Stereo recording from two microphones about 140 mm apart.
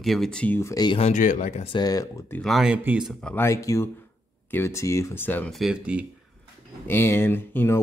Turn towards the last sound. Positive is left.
turn(degrees=15)  # may be behind; listen again after turning